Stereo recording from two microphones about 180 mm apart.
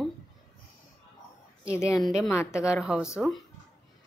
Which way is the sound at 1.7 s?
15° left (ahead or behind).